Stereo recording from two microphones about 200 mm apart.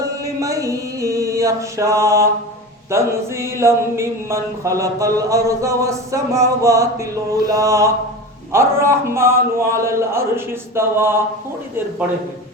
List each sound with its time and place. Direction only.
0.2 s mantra: 15° right (ahead or behind)